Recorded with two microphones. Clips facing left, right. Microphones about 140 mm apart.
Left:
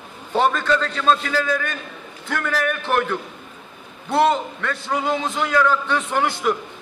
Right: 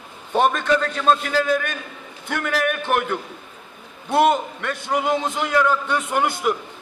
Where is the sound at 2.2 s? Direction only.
15° right (ahead or behind).